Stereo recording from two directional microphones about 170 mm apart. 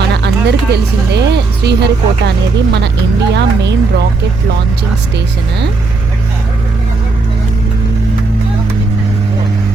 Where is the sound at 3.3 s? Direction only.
90° right.